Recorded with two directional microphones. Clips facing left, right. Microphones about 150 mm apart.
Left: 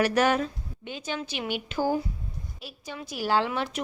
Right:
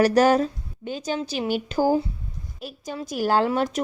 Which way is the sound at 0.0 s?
35° right (ahead or behind).